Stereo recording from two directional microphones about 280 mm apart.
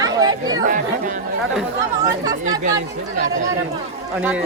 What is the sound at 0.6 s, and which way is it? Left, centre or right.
Speech, right.